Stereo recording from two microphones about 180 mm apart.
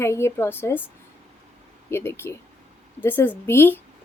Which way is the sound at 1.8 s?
15° left (ahead or behind).